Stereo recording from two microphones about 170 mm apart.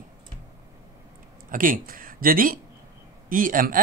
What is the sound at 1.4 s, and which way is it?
Speech, 55° right (ahead or behind).